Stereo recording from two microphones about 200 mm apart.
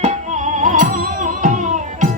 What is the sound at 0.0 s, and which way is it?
Music, 35° right (ahead or behind).